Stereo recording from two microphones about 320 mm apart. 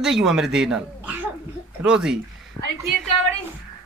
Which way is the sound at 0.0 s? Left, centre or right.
Centre.